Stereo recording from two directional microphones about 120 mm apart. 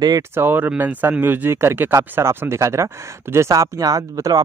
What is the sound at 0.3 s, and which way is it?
Speech, 15° right (ahead or behind).